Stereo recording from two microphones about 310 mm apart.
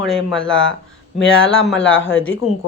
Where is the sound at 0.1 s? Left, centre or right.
Centre.